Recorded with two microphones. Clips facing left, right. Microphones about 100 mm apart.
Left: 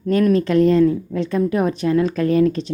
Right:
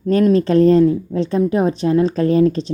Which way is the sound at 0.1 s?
30° right (ahead or behind).